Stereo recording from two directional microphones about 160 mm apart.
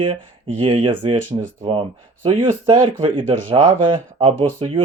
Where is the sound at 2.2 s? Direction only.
30° right (ahead or behind).